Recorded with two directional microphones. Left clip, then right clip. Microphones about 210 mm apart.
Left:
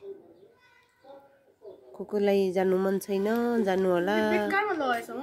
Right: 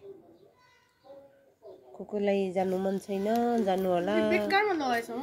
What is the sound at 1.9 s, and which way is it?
Speech, 25° left (ahead or behind).